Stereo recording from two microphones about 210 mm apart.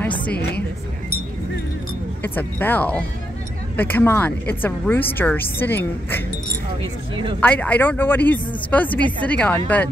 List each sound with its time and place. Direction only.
0.3 s a woman's voice: 50° left (ahead or behind)
2.2 s speech: 10° left (ahead or behind)
7.3 s speech: 5° left (ahead or behind)